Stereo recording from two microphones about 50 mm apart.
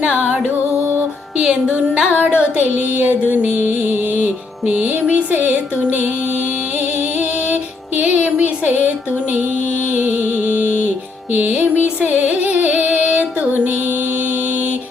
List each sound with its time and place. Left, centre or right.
0.1 s music: right
1.5 s music: centre
2.2 s music: right
5.3 s a sound: right
8.0 s music: right
9.9 s music: right